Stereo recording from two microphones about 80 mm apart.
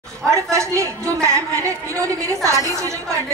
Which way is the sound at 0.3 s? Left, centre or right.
Right.